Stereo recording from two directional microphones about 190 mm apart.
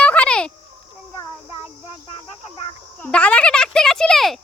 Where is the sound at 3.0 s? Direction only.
10° left (ahead or behind).